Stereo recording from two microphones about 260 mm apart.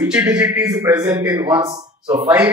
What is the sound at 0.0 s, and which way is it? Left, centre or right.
A man's voice, centre.